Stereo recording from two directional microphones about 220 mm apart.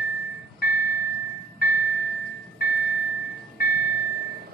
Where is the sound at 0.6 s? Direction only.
45° left (ahead or behind).